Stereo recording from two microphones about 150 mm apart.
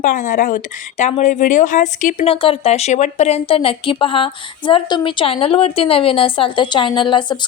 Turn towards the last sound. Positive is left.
turn(degrees=30)  # may be behind; listen again after turning